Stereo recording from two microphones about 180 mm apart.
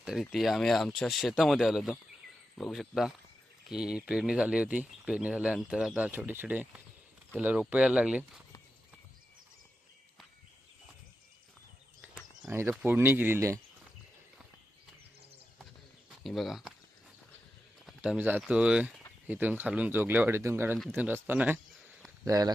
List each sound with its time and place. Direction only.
0.0 s speech: centre (ahead or behind)
12.5 s speech: 15° right (ahead or behind)
16.2 s speech: centre (ahead or behind)
17.8 s speech: 5° right (ahead or behind); by 22.5 s 20° right (ahead or behind)